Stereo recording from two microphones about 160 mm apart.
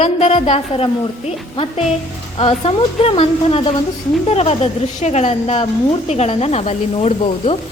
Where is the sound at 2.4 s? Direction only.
40° left (ahead or behind).